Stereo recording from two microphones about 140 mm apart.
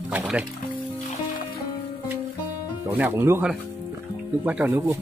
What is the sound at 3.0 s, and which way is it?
Speech, 15° right (ahead or behind).